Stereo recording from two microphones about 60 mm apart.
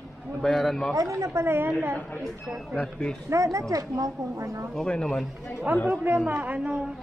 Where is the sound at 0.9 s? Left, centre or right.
Right.